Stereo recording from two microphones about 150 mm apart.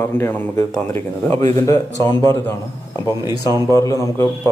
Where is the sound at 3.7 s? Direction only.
20° left (ahead or behind).